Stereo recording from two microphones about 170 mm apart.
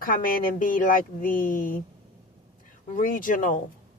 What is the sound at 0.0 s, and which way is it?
Speech, 55° left (ahead or behind).